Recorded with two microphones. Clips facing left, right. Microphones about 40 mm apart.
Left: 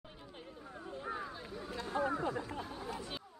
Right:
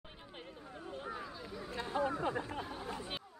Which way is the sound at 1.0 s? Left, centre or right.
Centre.